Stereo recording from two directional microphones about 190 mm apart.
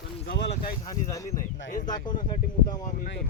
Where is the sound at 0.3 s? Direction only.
65° left (ahead or behind).